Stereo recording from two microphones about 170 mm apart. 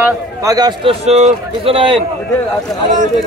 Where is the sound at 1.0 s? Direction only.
40° right (ahead or behind).